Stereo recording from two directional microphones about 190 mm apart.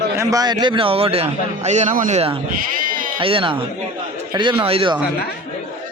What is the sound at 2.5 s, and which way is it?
Bleat, 50° right (ahead or behind).